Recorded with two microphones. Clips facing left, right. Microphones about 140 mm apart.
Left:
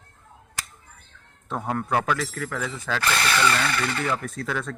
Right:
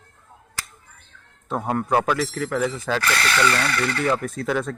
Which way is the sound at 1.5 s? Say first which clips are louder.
Right 4 dB; 15° right (ahead or behind).